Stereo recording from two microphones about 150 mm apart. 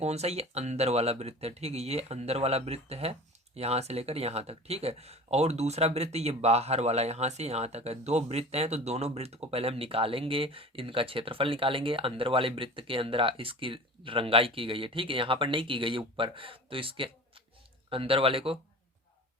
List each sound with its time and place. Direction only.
0.0 s a man's voice: 45° right (ahead or behind)